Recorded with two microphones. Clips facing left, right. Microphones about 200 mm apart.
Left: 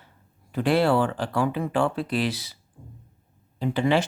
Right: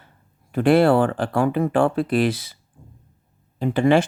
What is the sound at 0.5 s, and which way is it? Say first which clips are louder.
Speech: right 5 dB; 50° right (ahead or behind).